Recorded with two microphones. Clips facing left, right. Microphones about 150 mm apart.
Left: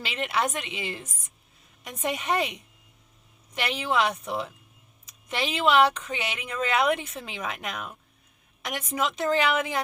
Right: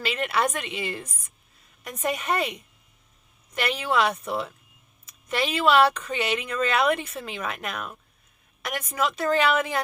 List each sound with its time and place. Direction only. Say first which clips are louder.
0.0 s a woman's voice: right 3 dB; 20° left (ahead or behind)